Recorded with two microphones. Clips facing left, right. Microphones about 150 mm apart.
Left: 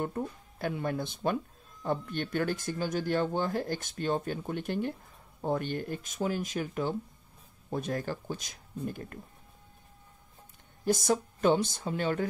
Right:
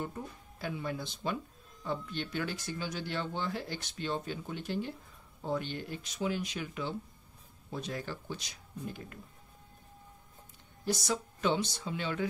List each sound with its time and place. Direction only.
0.0 s speech: 55° left (ahead or behind)
10.9 s speech: 50° left (ahead or behind)